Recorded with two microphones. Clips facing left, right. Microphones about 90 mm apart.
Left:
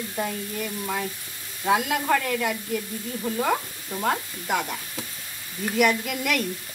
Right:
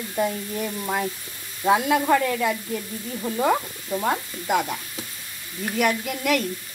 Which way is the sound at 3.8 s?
10° right (ahead or behind).